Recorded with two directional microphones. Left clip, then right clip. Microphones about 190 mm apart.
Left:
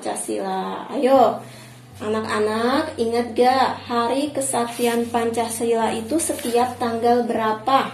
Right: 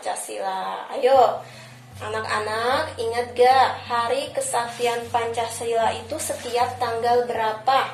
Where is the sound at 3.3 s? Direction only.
35° left (ahead or behind).